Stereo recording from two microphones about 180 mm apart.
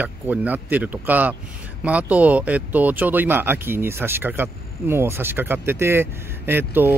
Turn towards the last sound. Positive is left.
turn(degrees=-10)  # may be behind; listen again after turning